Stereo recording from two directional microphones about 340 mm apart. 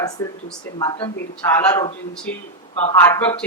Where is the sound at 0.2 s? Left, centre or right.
Centre.